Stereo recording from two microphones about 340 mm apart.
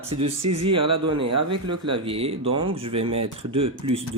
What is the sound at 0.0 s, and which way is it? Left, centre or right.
Speech, centre.